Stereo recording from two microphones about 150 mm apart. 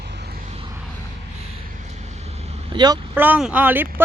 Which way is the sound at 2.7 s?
30° right (ahead or behind).